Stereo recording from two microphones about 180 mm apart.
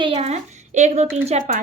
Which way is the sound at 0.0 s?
35° right (ahead or behind).